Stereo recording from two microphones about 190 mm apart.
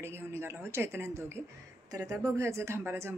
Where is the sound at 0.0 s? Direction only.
10° right (ahead or behind).